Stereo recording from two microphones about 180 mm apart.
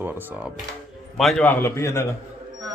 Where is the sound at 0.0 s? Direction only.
10° right (ahead or behind).